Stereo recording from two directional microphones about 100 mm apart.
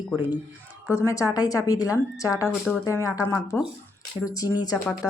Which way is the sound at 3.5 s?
20° left (ahead or behind).